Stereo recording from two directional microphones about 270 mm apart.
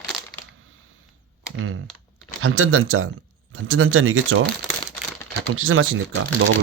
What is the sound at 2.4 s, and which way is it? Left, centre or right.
Speech, right.